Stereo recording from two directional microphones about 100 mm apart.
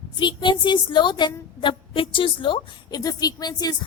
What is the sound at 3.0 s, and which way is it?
Speech, 40° left (ahead or behind).